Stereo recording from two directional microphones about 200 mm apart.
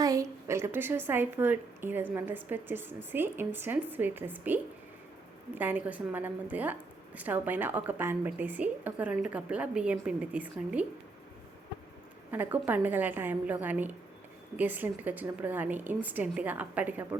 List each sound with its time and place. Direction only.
0.0 s a woman's voice: 15° right (ahead or behind)
12.3 s a woman's voice: 10° right (ahead or behind)